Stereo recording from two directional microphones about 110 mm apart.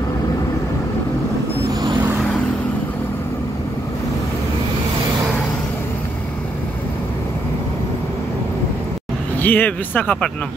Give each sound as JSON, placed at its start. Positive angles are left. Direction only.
{"t": 9.4, "sound": "speech", "side_deg": 15}